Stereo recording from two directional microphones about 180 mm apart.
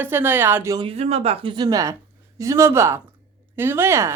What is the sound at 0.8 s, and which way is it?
Speech, 35° right (ahead or behind).